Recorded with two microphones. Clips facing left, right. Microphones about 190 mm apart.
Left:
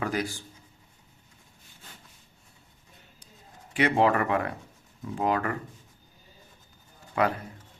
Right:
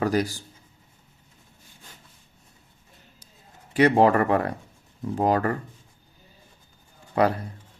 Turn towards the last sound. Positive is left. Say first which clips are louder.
# right 4 dB
turn(degrees=-35)  # may be behind; listen again after turning